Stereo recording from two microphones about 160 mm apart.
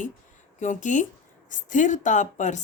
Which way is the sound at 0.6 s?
50° left (ahead or behind).